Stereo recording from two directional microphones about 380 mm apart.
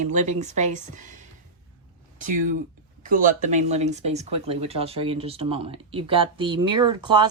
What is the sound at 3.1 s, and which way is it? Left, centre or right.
Speech, right.